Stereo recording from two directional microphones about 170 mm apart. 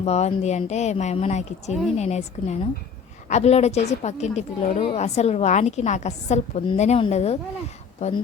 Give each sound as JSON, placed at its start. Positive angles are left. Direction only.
{"t": 0.0, "sound": "a woman's voice", "side_deg": 40}